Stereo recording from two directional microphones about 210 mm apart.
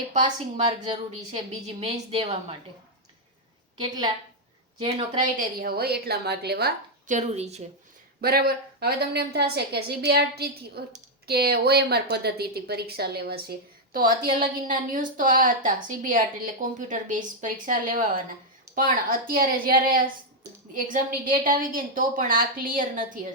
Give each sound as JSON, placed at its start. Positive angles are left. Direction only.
{"t": 0.1, "sound": "a woman's voice", "side_deg": -30}
{"t": 3.8, "sound": "a woman's voice", "side_deg": -20}
{"t": 5.2, "sound": "a woman's voice", "side_deg": -40}
{"t": 7.1, "sound": "a woman's voice", "side_deg": -30}
{"t": 8.2, "sound": "a woman's voice", "side_deg": -45}